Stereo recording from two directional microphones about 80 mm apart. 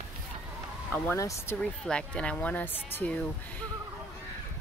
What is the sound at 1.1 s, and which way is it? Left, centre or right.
Speech, left.